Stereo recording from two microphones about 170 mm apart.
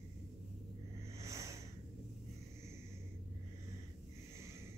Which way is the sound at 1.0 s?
15° right (ahead or behind).